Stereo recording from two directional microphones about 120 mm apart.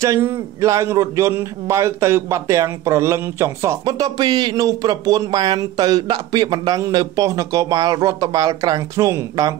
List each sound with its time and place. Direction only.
0.0 s a man's voice: 25° right (ahead or behind)
3.8 s speech: 35° right (ahead or behind)